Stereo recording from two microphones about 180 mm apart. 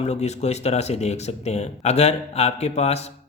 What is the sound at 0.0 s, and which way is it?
Speech, 40° left (ahead or behind).